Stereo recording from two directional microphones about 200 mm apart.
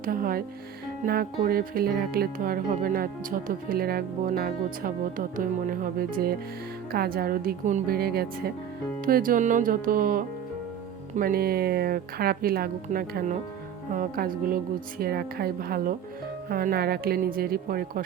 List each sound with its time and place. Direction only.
0.0 s speech: 45° right (ahead or behind)